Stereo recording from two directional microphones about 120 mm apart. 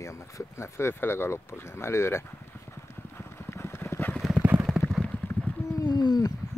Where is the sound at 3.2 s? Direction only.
20° left (ahead or behind).